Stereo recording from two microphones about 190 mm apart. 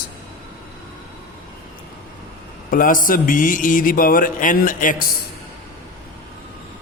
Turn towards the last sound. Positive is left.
turn(degrees=45)  # may be behind; listen again after turning